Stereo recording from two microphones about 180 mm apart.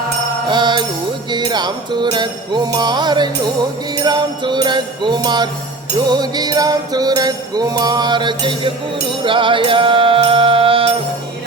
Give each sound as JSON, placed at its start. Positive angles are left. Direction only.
{"t": 0.4, "sound": "mantra", "side_deg": -25}
{"t": 1.3, "sound": "music", "side_deg": -25}